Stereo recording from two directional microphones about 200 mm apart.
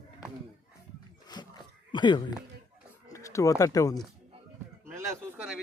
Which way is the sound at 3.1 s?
15° left (ahead or behind).